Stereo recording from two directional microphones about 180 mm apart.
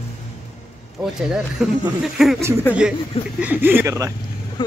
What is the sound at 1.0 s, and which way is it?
Speech, 5° right (ahead or behind).